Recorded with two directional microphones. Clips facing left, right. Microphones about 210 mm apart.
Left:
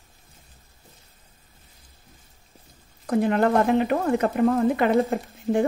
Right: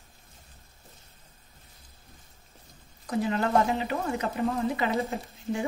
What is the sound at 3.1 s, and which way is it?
Speech, 55° left (ahead or behind).